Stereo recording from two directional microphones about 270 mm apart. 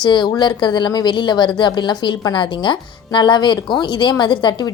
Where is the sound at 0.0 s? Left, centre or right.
Centre.